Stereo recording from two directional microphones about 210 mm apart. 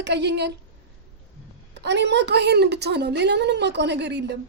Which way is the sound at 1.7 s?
55° right (ahead or behind).